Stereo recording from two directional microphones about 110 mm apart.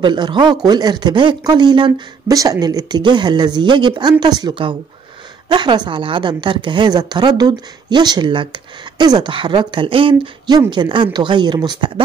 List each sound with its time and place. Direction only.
0.0 s a woman's voice: 45° right (ahead or behind)